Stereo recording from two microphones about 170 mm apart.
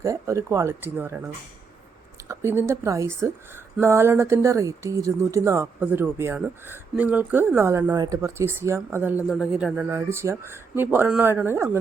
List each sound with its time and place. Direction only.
0.0 s speech: 15° right (ahead or behind)
2.2 s speech: 15° right (ahead or behind)